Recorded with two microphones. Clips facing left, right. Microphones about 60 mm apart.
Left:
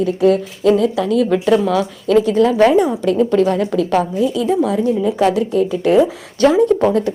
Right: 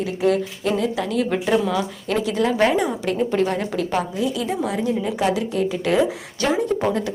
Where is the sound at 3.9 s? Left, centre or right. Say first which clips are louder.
Left 6 dB; left.